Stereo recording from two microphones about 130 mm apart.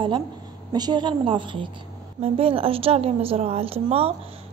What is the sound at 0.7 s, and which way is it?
A woman's voice, 35° right (ahead or behind).